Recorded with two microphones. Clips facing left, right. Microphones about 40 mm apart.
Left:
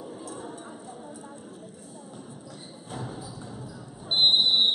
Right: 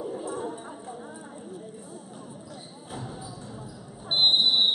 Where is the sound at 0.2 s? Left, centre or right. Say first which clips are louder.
Right 6 dB; right.